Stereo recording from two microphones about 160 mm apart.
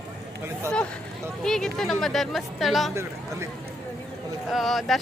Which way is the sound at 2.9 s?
15° right (ahead or behind).